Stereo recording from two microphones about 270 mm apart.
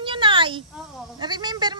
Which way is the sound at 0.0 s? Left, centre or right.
Centre.